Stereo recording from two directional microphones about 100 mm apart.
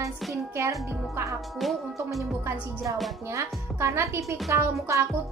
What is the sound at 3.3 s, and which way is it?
A woman's voice, 30° right (ahead or behind).